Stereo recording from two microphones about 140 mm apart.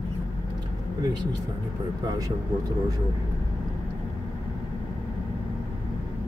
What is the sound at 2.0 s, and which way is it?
Speech, 25° right (ahead or behind).